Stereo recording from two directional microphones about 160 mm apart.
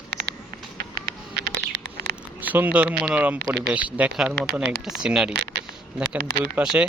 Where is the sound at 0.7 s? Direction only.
75° right (ahead or behind); by 2.1 s 90° right.